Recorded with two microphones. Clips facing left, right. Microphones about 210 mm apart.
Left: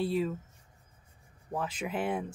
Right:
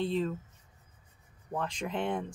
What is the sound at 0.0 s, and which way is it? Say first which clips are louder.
Speech: left 1 dB; 10° left (ahead or behind).